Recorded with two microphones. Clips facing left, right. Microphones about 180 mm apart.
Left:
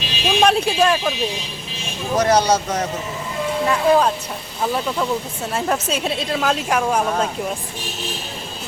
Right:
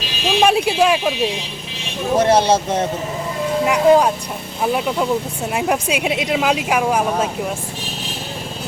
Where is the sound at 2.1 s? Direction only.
25° right (ahead or behind).